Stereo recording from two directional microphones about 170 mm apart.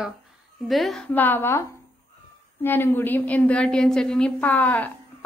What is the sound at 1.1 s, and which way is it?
A woman's voice, 10° left (ahead or behind).